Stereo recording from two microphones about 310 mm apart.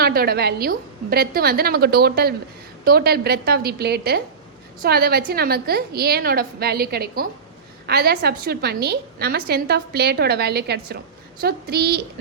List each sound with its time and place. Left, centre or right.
0.0 s a woman's voice: right